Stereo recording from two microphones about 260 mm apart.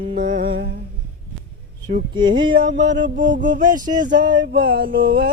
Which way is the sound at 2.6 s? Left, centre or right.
Right.